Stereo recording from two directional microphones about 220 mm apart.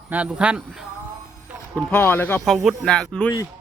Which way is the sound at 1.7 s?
5° left (ahead or behind).